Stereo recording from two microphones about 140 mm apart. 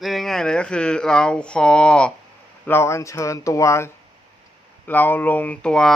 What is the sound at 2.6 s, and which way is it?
A man's voice, 15° left (ahead or behind).